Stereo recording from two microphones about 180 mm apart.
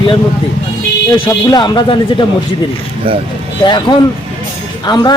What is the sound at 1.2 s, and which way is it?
Speech, 25° left (ahead or behind).